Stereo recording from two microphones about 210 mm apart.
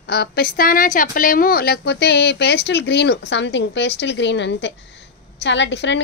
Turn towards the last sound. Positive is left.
turn(degrees=55)  # may be behind; listen again after turning